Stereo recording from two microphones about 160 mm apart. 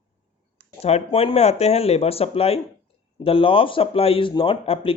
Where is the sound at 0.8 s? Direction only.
40° left (ahead or behind).